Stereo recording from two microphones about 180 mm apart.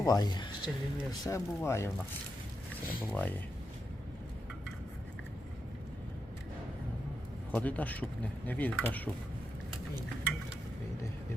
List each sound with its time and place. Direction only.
0.0 s speech: 20° left (ahead or behind)
3.1 s speech: 10° left (ahead or behind)
7.5 s speech: 10° left (ahead or behind)